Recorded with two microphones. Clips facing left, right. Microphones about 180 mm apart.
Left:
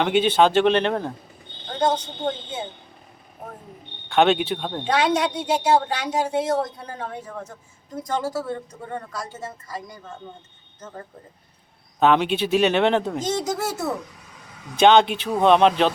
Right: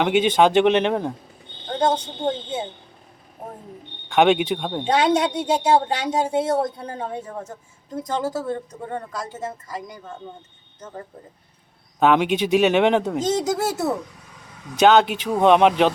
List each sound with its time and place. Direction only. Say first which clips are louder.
0.0 s speech: right 1 dB; 10° right (ahead or behind)
1.8 s speech: right 1 dB; 25° right (ahead or behind)
4.1 s speech: right 2 dB; 10° right (ahead or behind)
4.8 s speech: right 2 dB; 25° right (ahead or behind); by 13.1 s 10° right (ahead or behind)
13.1 s speech: right 3 dB; 20° right (ahead or behind)
14.8 s speech: even; 5° right (ahead or behind)